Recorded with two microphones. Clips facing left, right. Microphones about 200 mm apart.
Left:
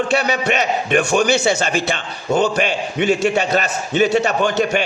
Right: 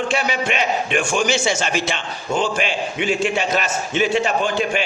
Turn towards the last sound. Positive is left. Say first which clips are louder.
# left 3 dB
turn(degrees=40)  # may be behind; listen again after turning